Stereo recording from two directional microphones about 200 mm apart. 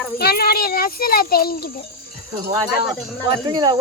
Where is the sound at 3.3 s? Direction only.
20° right (ahead or behind).